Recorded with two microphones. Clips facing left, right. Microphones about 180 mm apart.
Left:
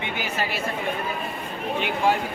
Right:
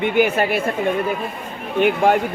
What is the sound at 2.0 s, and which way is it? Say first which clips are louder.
Speech: right 5 dB; 60° right (ahead or behind).